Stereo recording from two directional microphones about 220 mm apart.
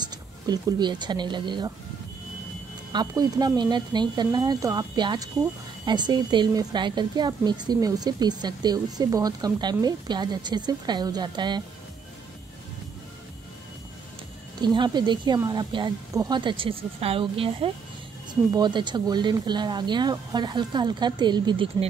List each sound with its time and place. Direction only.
0.0 s speech: 20° right (ahead or behind)
2.9 s speech: 20° right (ahead or behind)
14.6 s speech: 20° right (ahead or behind)